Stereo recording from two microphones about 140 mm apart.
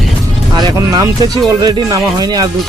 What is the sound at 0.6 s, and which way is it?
Speech, 30° right (ahead or behind).